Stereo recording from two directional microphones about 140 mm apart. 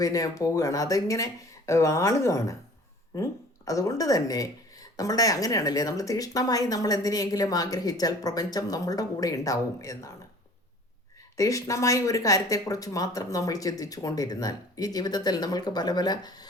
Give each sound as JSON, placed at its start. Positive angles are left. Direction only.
{"t": 0.0, "sound": "speech", "side_deg": 25}
{"t": 11.3, "sound": "speech", "side_deg": 20}